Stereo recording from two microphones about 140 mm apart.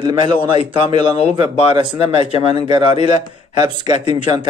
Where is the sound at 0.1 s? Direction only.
55° left (ahead or behind).